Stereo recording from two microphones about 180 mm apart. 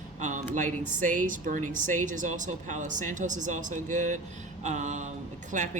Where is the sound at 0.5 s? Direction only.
45° right (ahead or behind).